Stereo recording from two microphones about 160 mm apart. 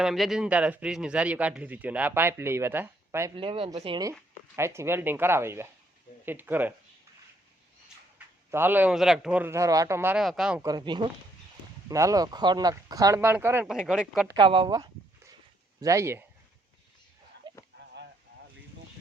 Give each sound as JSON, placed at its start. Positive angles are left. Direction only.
{"t": 0.0, "sound": "a man's voice", "side_deg": 0}
{"t": 3.3, "sound": "speech", "side_deg": -35}
{"t": 4.5, "sound": "a man's voice", "side_deg": -15}
{"t": 8.4, "sound": "a man's voice", "side_deg": -15}
{"t": 10.6, "sound": "speech", "side_deg": -25}
{"t": 14.3, "sound": "a man's voice", "side_deg": -30}
{"t": 17.5, "sound": "a sound", "side_deg": -30}